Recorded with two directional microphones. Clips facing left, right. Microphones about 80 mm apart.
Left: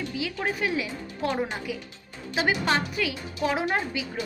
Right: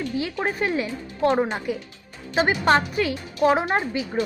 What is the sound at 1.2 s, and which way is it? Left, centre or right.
Speech, right.